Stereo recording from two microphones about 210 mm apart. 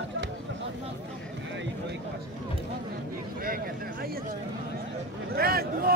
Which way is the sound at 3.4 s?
45° right (ahead or behind).